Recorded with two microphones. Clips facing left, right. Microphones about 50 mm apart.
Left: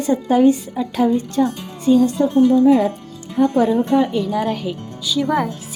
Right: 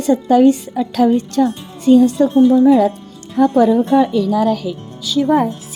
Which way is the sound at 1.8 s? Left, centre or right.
Right.